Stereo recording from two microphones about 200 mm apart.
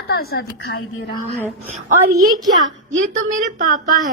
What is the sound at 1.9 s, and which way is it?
A woman's voice, 45° right (ahead or behind).